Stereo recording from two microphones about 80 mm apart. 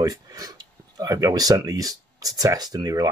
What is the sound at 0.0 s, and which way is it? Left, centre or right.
Speech, right.